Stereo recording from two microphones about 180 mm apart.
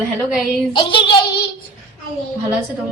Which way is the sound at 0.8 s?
25° left (ahead or behind).